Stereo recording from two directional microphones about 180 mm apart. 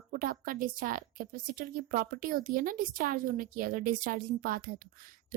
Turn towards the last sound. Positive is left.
turn(degrees=-50)  # may be behind; listen again after turning